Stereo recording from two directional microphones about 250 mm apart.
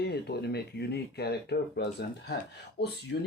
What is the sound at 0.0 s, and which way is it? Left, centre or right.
Speech, left.